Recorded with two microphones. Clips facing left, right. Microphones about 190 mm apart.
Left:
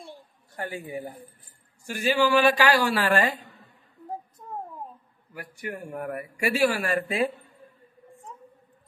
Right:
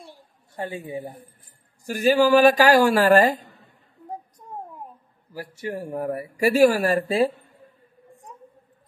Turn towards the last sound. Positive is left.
turn(degrees=-30)  # may be behind; listen again after turning